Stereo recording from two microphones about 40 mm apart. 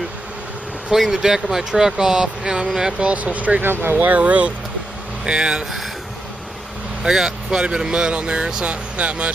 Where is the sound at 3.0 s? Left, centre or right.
Right.